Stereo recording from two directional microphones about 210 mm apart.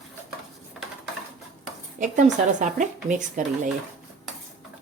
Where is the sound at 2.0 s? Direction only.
40° right (ahead or behind).